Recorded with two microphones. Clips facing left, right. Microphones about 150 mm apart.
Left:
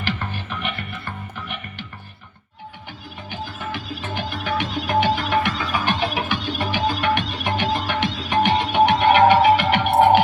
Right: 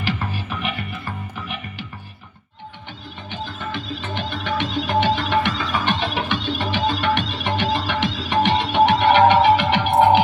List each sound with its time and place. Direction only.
0.3 s music: 5° right (ahead or behind)
3.6 s music: 5° left (ahead or behind)